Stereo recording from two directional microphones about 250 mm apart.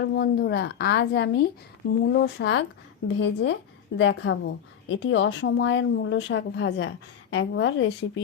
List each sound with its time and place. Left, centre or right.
0.0 s a woman's voice: left